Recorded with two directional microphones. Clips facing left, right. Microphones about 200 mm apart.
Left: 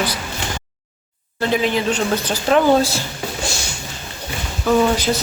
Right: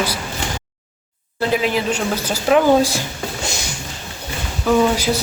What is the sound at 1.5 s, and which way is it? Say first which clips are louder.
A woman's voice: left 1 dB; 5° right (ahead or behind).